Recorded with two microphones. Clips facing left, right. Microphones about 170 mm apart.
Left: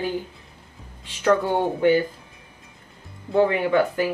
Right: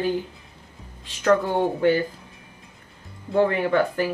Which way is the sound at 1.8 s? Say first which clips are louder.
Left 3 dB; 15° left (ahead or behind).